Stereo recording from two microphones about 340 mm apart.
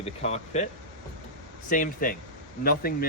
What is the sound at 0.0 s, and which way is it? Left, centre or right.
Speech, centre.